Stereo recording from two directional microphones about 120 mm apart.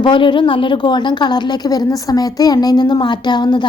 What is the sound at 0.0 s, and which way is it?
A woman's voice, 45° left (ahead or behind).